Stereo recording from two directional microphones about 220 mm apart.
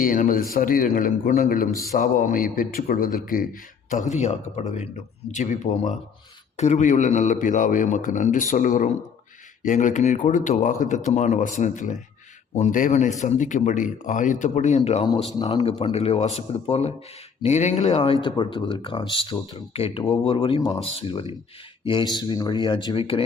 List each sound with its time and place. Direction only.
0.0 s a man's voice: 40° left (ahead or behind)